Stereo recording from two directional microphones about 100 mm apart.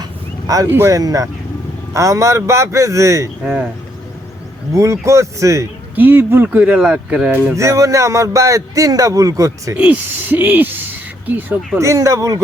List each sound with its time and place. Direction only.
0.0 s a sound: 35° right (ahead or behind)
0.7 s speech: 25° right (ahead or behind)
0.9 s a man's voice: 35° right (ahead or behind)
3.4 s speech: 15° right (ahead or behind)
4.7 s a man's voice: 30° right (ahead or behind)
6.0 s speech: 20° right (ahead or behind)
7.5 s a man's voice: 30° right (ahead or behind)
9.7 s speech: 15° right (ahead or behind)
11.8 s a man's voice: 30° right (ahead or behind)